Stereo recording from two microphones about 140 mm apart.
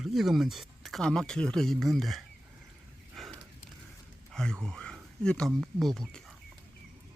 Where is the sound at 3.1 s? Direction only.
Centre (ahead or behind).